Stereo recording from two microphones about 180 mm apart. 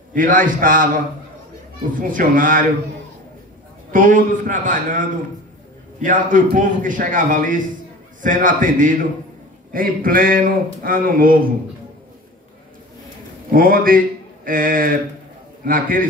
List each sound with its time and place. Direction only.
0.1 s speech: 50° right (ahead or behind)
3.9 s speech: 50° right (ahead or behind)
13.5 s a man's voice: 50° right (ahead or behind)